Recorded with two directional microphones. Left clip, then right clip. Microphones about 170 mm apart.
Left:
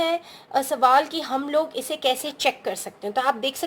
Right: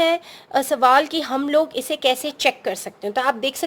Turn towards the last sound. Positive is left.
turn(degrees=-35)  # may be behind; listen again after turning